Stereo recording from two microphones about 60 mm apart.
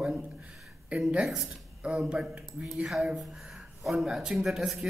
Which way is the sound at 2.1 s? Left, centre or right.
Centre.